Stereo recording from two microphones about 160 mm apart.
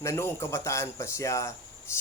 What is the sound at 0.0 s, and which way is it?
Speech, 15° left (ahead or behind).